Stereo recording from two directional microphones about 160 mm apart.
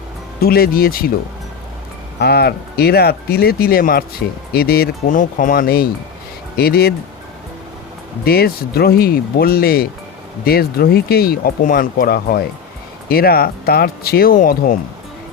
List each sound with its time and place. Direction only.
0.3 s speech: 75° left (ahead or behind)
2.1 s speech: 90° left; by 6.9 s 75° left (ahead or behind)
8.2 s speech: 75° left (ahead or behind)